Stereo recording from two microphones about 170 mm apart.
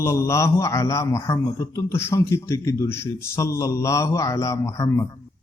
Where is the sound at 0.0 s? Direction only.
15° left (ahead or behind).